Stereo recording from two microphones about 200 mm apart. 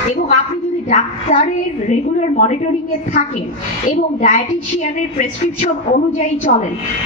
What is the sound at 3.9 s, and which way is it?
A woman's voice, 40° left (ahead or behind).